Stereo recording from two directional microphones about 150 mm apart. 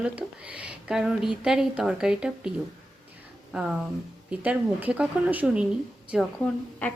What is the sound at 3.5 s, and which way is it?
Speech, 5° right (ahead or behind).